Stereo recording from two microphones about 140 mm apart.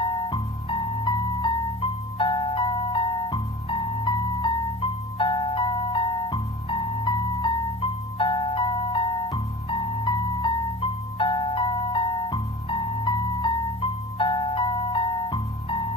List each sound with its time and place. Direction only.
0.0 s music: 35° left (ahead or behind)